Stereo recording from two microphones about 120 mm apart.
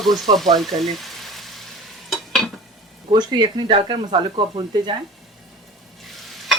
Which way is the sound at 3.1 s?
35° right (ahead or behind).